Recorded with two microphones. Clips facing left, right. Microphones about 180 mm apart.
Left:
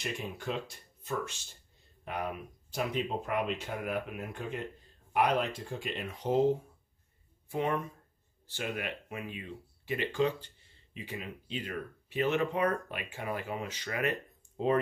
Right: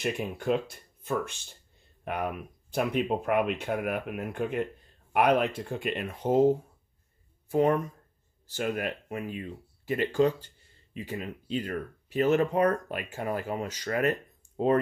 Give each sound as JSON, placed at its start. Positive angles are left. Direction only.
{"t": 0.0, "sound": "speech", "side_deg": -55}
{"t": 7.5, "sound": "speech", "side_deg": -40}